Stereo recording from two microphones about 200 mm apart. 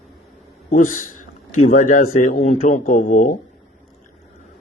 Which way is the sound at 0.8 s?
90° left.